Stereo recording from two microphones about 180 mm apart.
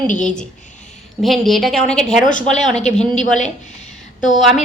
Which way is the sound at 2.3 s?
40° left (ahead or behind).